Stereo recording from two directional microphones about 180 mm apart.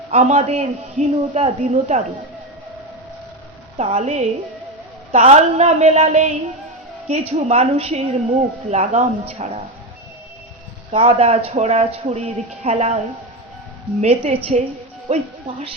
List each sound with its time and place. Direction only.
0.1 s a woman's voice: 35° right (ahead or behind)
3.8 s a woman's voice: 40° right (ahead or behind)
10.9 s a woman's voice: 35° right (ahead or behind)
14.0 s a woman's voice: 35° right (ahead or behind)